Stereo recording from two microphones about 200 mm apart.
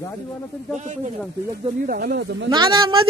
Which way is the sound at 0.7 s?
35° right (ahead or behind).